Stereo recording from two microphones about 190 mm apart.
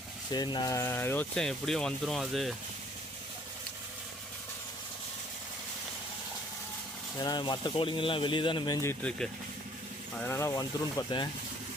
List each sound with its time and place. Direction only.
0.3 s speech: 20° left (ahead or behind); by 2.6 s centre (ahead or behind)
7.2 s speech: 20° left (ahead or behind)